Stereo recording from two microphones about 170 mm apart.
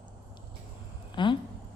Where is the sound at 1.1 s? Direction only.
30° left (ahead or behind).